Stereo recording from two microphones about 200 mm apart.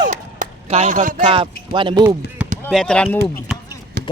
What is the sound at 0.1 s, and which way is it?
Chop, 35° right (ahead or behind).